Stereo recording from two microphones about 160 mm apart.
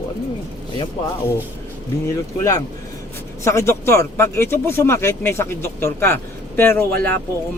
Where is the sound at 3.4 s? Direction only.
20° left (ahead or behind).